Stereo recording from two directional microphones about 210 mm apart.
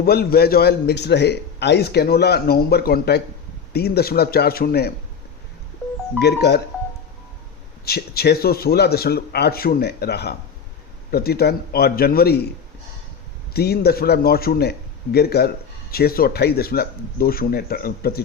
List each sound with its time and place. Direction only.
0.0 s a man's voice: 45° left (ahead or behind)
6.1 s a man's voice: 50° left (ahead or behind)
7.9 s a man's voice: 50° left (ahead or behind)
13.5 s a man's voice: 50° left (ahead or behind)